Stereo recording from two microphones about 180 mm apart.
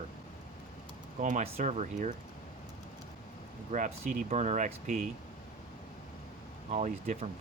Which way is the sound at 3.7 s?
45° right (ahead or behind).